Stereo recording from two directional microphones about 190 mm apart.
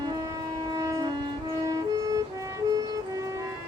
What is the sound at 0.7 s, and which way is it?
Train, 15° right (ahead or behind).